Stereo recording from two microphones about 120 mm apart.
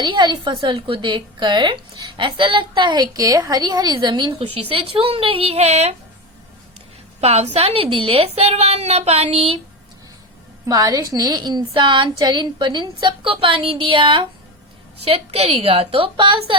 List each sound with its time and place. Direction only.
0.0 s a woman's voice: 40° right (ahead or behind)
4.7 s a woman's voice: 50° right (ahead or behind)
7.2 s a woman's voice: 60° right (ahead or behind)
10.7 s a woman's voice: 30° right (ahead or behind)
15.0 s a woman's voice: 55° right (ahead or behind)